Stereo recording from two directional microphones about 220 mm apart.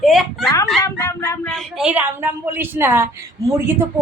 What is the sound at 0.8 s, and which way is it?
Speech, 15° left (ahead or behind).